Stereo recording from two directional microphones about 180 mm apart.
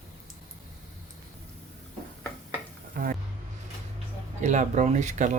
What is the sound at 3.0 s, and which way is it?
Music, 55° right (ahead or behind).